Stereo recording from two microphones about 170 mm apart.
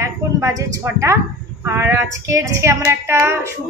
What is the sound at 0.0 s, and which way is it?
A woman's voice, 15° right (ahead or behind).